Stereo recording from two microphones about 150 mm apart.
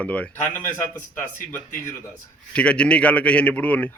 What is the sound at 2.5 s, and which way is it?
A man's voice, 10° left (ahead or behind).